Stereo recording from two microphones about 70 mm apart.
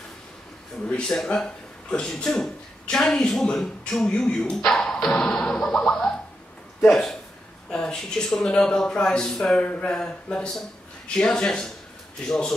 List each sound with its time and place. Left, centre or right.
0.8 s a man's voice: centre